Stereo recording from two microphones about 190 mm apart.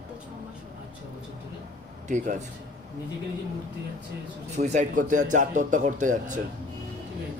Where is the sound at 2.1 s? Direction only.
40° right (ahead or behind).